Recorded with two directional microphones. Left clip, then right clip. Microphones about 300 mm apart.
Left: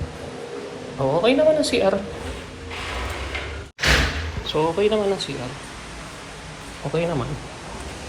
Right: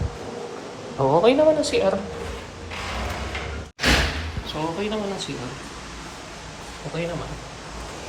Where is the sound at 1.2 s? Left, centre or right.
Centre.